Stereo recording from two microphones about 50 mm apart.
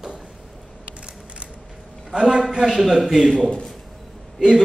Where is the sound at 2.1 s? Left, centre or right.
Centre.